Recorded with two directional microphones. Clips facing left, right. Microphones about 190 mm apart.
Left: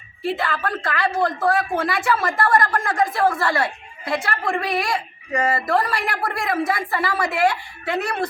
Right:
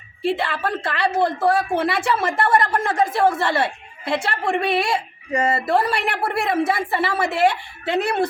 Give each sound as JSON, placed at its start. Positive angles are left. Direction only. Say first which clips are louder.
{"t": 0.2, "sound": "speech", "louder": "right 2 dB", "side_deg": -25}